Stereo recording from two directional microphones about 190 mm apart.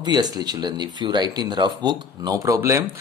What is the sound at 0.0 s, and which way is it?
Speech, 20° right (ahead or behind).